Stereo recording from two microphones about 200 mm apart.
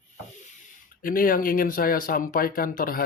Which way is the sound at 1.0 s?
45° left (ahead or behind).